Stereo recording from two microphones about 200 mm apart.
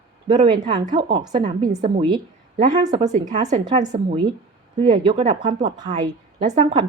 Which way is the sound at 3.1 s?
40° right (ahead or behind).